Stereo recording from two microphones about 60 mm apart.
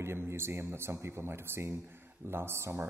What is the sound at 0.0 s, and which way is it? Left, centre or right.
Speech, right.